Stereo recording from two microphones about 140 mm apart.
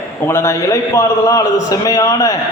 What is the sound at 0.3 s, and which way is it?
A man's voice, 20° left (ahead or behind).